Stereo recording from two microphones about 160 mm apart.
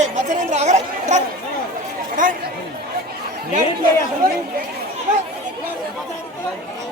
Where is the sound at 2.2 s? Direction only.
55° right (ahead or behind).